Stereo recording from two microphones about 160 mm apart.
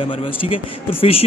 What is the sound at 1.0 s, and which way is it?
Speech, 40° left (ahead or behind).